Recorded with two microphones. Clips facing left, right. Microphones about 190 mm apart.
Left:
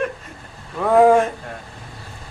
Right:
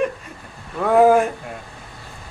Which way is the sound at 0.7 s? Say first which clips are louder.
Left 1 dB; 5° right (ahead or behind).